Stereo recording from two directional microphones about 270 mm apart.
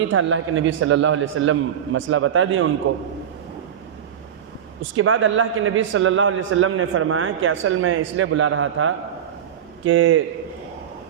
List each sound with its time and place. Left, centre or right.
0.1 s a man's voice: right
4.9 s a man's voice: right